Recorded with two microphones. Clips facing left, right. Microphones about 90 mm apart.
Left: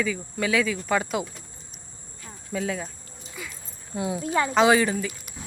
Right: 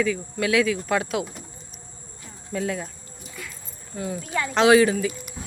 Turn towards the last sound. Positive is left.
turn(degrees=0)  # may be behind; listen again after turning